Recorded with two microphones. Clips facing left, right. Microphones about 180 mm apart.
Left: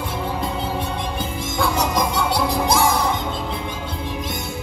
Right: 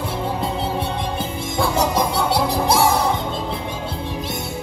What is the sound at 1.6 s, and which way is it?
Music, 30° right (ahead or behind).